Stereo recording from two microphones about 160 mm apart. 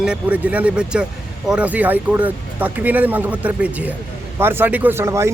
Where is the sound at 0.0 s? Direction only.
5° right (ahead or behind).